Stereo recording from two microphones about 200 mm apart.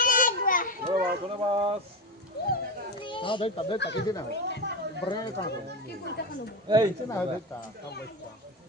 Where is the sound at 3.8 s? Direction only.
60° left (ahead or behind).